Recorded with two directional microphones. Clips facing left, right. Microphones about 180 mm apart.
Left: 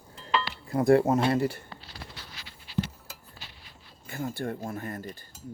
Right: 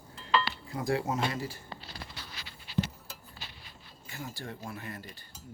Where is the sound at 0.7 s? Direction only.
55° left (ahead or behind).